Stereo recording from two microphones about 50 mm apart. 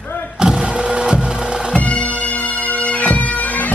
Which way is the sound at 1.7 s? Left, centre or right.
Left.